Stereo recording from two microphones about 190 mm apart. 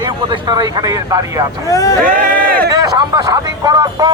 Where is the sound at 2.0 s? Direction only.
45° right (ahead or behind).